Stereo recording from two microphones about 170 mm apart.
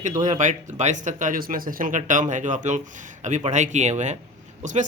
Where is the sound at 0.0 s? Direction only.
45° right (ahead or behind).